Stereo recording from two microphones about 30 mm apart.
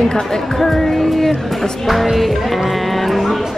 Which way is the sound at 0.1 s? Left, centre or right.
Left.